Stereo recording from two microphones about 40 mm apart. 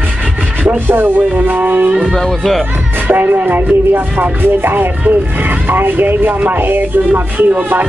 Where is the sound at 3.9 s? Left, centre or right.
Right.